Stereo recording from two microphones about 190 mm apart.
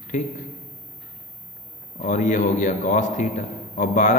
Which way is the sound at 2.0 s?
40° left (ahead or behind).